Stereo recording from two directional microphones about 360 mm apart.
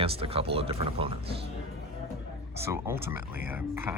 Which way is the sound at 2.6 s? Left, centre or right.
Centre.